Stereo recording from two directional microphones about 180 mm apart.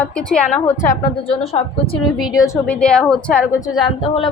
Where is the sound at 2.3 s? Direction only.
20° left (ahead or behind).